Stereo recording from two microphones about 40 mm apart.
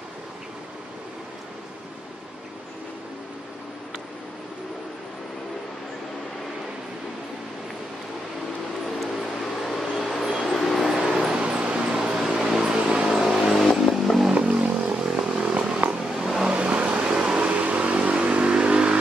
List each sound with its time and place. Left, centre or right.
9.0 s vehicle: centre
10.8 s vehicle: centre
11.3 s vehicle: right
13.8 s vehicle: centre
14.3 s a sound: right
15.0 s vehicle: centre
15.8 s a sound: right
16.2 s vehicle: centre
16.4 s vehicle: right